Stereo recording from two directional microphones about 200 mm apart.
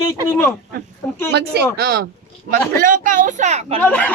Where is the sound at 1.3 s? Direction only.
55° right (ahead or behind).